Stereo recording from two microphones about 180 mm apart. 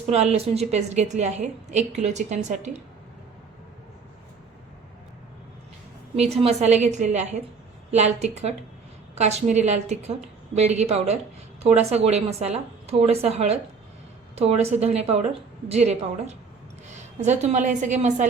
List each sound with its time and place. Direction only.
0.1 s a woman's voice: 35° right (ahead or behind)
6.1 s a woman's voice: 35° right (ahead or behind)